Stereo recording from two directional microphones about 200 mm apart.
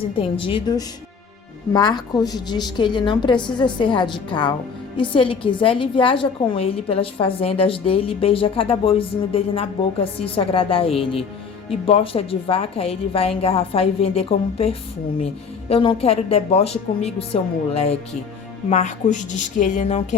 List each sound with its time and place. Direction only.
0.2 s a woman's voice: 25° left (ahead or behind)